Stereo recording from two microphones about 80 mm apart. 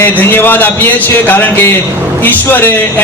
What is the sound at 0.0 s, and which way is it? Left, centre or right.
Speech, left.